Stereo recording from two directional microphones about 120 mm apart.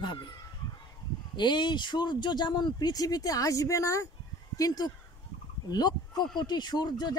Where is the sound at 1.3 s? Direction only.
40° left (ahead or behind).